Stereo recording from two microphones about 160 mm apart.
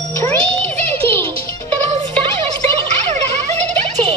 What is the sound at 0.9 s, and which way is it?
Music, 15° left (ahead or behind).